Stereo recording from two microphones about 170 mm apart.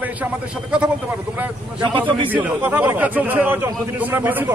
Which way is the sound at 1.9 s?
30° right (ahead or behind).